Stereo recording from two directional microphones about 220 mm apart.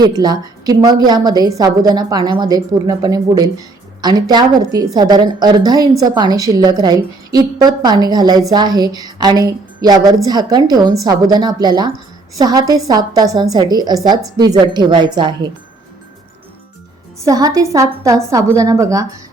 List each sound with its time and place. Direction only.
0.0 s a woman's voice: 20° right (ahead or behind)
17.2 s a woman's voice: 15° right (ahead or behind)